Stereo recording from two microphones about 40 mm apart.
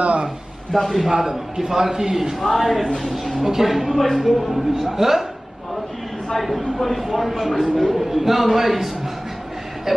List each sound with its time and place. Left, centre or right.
0.0 s a sound: right
0.7 s a man's voice: centre
1.1 s a man's voice: centre
2.4 s speech: centre
6.3 s a man's voice: centre